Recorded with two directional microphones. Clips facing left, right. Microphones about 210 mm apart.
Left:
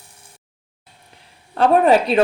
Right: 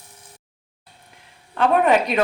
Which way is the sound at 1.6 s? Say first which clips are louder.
Left 3 dB; 35° left (ahead or behind).